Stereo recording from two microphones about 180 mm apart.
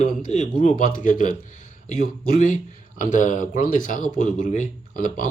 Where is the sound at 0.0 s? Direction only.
45° left (ahead or behind).